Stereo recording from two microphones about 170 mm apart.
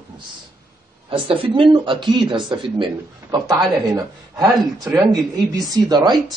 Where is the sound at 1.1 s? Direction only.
30° right (ahead or behind).